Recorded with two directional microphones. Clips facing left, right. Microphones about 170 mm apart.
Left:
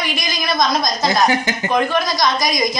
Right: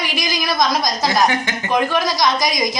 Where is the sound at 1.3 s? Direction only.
35° left (ahead or behind).